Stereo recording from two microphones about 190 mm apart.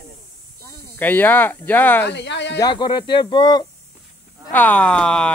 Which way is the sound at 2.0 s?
70° left (ahead or behind).